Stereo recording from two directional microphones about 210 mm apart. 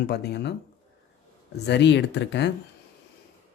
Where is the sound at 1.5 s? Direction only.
55° left (ahead or behind).